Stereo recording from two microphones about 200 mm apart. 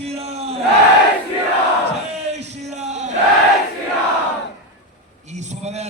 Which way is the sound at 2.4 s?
35° right (ahead or behind).